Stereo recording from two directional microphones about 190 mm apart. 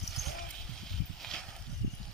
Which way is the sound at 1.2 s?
5° left (ahead or behind).